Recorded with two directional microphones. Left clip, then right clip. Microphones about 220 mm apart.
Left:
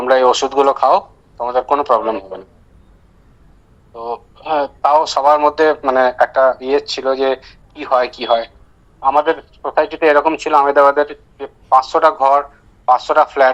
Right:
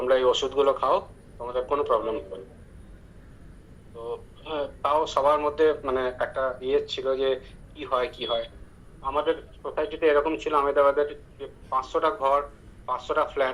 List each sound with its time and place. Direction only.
0.0 s speech: 45° left (ahead or behind)
3.9 s speech: 45° left (ahead or behind)